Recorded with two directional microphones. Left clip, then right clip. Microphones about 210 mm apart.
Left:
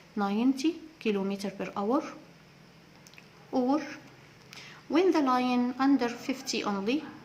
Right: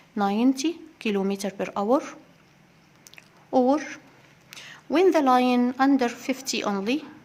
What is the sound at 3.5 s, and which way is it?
Speech, 45° right (ahead or behind).